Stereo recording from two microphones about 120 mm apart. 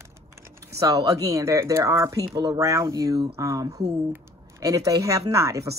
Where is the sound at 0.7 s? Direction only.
30° right (ahead or behind).